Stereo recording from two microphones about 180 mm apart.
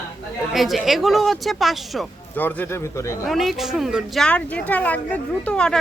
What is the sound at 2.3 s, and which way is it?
Speech, 10° left (ahead or behind).